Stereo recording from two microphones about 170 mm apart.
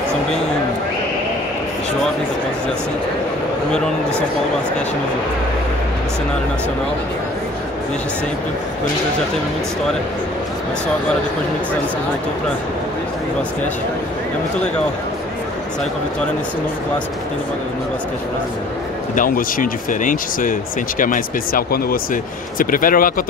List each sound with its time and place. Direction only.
19.1 s speech: 55° left (ahead or behind)